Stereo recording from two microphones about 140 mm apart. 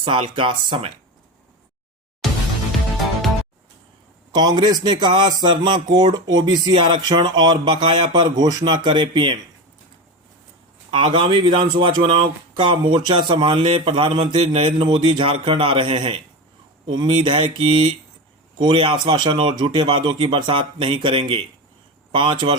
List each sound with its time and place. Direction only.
0.0 s speech: 40° right (ahead or behind)
4.4 s speech: 30° right (ahead or behind)
10.9 s speech: 40° right (ahead or behind)